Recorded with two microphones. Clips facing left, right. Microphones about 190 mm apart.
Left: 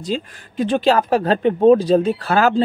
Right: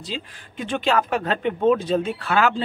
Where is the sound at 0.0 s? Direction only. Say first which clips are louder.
Left 9 dB; 40° left (ahead or behind).